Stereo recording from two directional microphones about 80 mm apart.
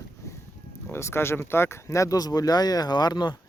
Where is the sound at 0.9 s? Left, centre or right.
Left.